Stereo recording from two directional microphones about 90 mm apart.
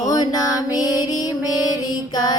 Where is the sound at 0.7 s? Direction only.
45° left (ahead or behind).